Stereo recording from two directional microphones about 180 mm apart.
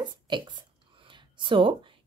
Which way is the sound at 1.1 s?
25° right (ahead or behind).